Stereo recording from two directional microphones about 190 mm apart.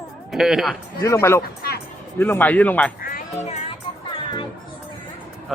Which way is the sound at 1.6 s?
55° left (ahead or behind).